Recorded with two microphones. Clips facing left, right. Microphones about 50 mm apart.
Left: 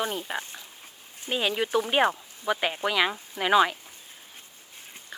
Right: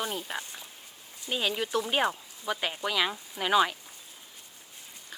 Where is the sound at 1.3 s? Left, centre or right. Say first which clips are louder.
Left 4 dB; centre.